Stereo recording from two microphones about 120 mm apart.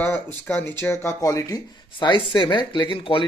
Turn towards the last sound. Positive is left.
turn(degrees=45)  # may be behind; listen again after turning